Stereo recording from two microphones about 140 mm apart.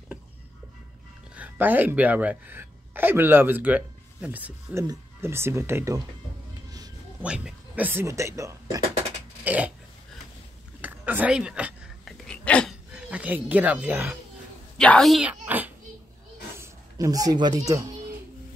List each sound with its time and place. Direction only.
1.3 s a woman's voice: 10° right (ahead or behind)
7.2 s speech: 5° right (ahead or behind)
9.4 s a sound: 10° right (ahead or behind)
10.8 s a sound: 10° right (ahead or behind)
12.3 s hiccup: 5° left (ahead or behind)
12.9 s speech: 10° right (ahead or behind)
14.8 s speech: 5° left (ahead or behind)
15.2 s a child's voice: 10° right (ahead or behind); by 17.8 s 25° right (ahead or behind)